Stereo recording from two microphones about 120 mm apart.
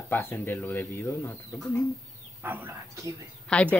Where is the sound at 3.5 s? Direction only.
10° left (ahead or behind).